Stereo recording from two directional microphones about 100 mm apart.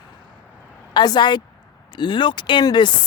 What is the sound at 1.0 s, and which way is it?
Speech, 45° left (ahead or behind).